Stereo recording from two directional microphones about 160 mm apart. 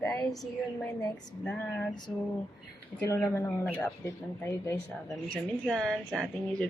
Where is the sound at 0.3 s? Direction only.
Centre (ahead or behind).